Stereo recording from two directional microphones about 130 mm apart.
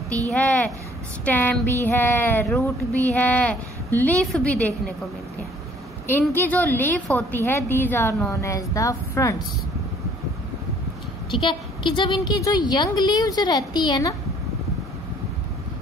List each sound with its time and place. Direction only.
0.3 s a woman's voice: 10° left (ahead or behind)
6.0 s a woman's voice: 15° left (ahead or behind)
11.2 s a woman's voice: 40° left (ahead or behind)